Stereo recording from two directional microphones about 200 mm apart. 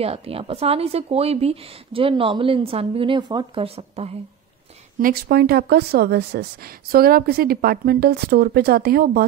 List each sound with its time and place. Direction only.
0.0 s a woman's voice: 30° right (ahead or behind)
4.9 s speech: 50° right (ahead or behind)